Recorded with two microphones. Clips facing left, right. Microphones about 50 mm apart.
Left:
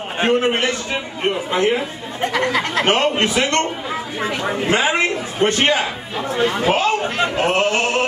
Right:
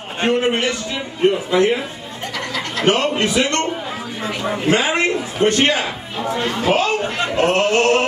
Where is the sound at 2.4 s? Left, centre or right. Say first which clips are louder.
Left 2 dB; left.